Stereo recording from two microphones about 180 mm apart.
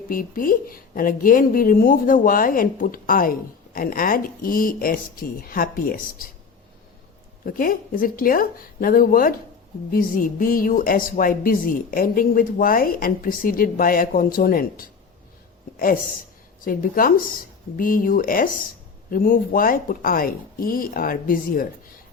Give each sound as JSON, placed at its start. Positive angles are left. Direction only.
{"t": 0.1, "sound": "speech", "side_deg": 50}
{"t": 7.4, "sound": "speech", "side_deg": 50}
{"t": 16.6, "sound": "speech", "side_deg": 50}